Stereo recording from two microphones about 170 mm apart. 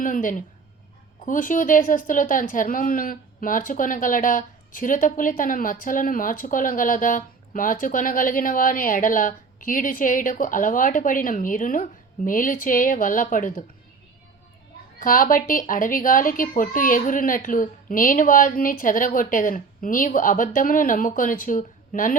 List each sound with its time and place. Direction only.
0.0 s speech: 50° left (ahead or behind)
14.9 s speech: 55° left (ahead or behind)